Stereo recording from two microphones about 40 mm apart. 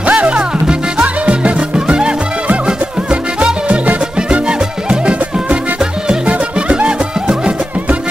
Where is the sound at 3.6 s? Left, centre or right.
Right.